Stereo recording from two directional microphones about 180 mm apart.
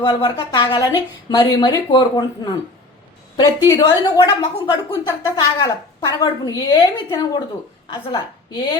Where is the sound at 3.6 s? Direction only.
25° left (ahead or behind).